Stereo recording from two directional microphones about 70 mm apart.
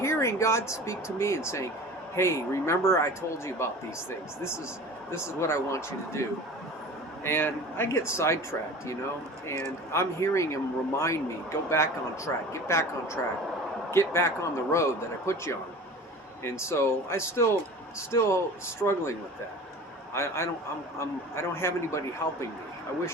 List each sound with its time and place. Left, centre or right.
0.0 s a man's voice: left
5.1 s a man's voice: left
7.3 s a man's voice: left
9.5 s a man's voice: left
13.9 s a man's voice: left
20.1 s a man's voice: left